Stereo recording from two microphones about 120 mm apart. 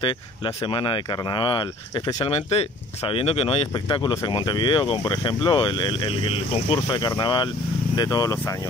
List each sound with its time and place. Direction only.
0.7 s speech: 45° left (ahead or behind)
2.2 s speech: 55° left (ahead or behind)
3.7 s speech: 35° left (ahead or behind); by 6.8 s 50° left (ahead or behind)
6.9 s speech: 35° left (ahead or behind)